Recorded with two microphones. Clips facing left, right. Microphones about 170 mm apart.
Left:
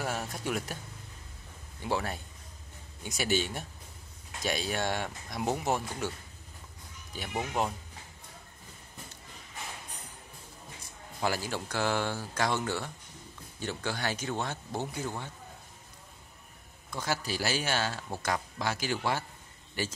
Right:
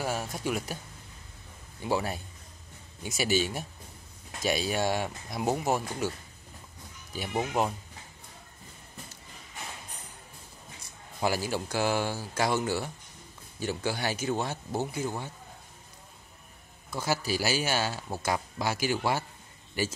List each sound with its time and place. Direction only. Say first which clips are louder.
0.0 s speech: right 3 dB; 5° right (ahead or behind)
1.8 s speech: right 3 dB; 5° right (ahead or behind)
7.1 s speech: right 4 dB; 10° right (ahead or behind)
11.1 s speech: right 3 dB; 10° right (ahead or behind)
16.9 s speech: right 4 dB; 5° right (ahead or behind)